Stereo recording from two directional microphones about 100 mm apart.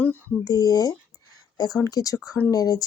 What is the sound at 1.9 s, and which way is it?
Speech, 35° left (ahead or behind).